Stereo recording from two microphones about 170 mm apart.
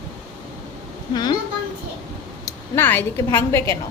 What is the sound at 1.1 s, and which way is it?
Speech, 25° left (ahead or behind).